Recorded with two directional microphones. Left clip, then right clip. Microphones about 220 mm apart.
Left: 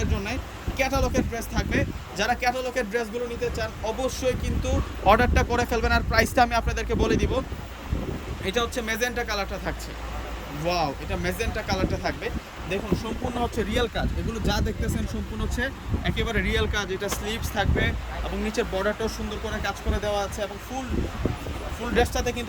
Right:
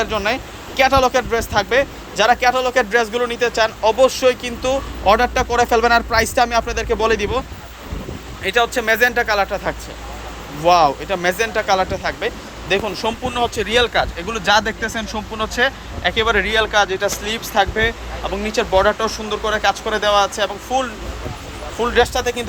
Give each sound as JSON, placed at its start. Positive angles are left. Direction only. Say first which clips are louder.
{"t": 0.0, "sound": "speech", "louder": "right 12 dB", "side_deg": 0}
{"t": 8.4, "sound": "speech", "louder": "right 11 dB", "side_deg": 0}
{"t": 15.4, "sound": "speech", "louder": "right 13 dB", "side_deg": 0}
{"t": 21.9, "sound": "speech", "louder": "right 7 dB", "side_deg": 0}